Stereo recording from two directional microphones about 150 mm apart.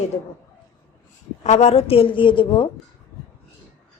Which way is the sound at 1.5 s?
45° left (ahead or behind).